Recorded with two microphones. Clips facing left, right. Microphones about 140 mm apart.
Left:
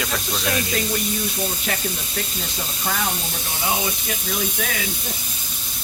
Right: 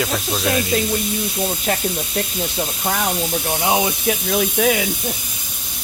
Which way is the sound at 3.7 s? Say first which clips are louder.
Right 6 dB; 75° right (ahead or behind).